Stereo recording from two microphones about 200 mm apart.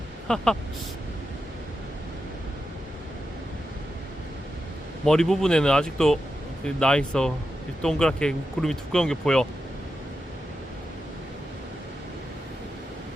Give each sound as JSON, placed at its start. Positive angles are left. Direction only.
{"t": 0.3, "sound": "speech", "side_deg": 5}
{"t": 5.0, "sound": "speech", "side_deg": 5}